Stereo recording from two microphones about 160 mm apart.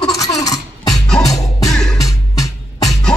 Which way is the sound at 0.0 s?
20° left (ahead or behind).